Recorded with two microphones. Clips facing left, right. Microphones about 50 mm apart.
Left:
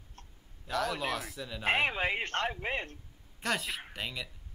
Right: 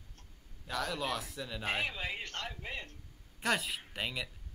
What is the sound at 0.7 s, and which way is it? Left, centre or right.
Speech, centre.